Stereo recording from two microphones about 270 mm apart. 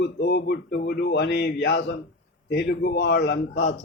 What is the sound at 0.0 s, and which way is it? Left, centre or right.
A man's voice, left.